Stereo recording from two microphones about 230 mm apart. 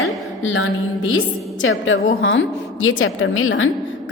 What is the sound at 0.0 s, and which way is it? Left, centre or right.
A woman's voice, left.